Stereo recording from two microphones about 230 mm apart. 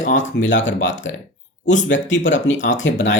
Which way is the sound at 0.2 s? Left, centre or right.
Left.